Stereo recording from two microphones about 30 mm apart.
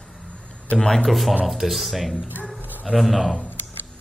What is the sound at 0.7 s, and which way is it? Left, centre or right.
Speech, centre.